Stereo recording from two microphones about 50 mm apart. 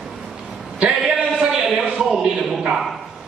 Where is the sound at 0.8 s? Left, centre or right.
Centre.